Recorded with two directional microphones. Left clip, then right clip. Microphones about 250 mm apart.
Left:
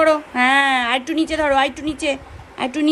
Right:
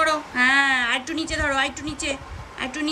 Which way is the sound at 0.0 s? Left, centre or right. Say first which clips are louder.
Left 4 dB; centre.